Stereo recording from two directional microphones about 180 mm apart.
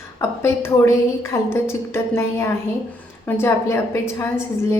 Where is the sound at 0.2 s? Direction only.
15° left (ahead or behind).